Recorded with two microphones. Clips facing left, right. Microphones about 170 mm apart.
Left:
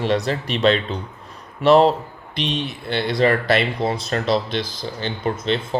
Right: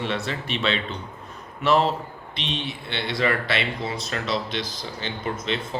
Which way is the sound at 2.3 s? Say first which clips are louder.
Left 7 dB; centre (ahead or behind).